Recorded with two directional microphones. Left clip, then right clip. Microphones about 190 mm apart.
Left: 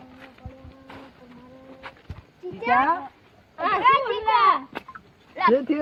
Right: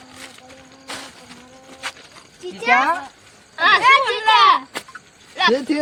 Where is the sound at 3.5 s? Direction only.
20° right (ahead or behind).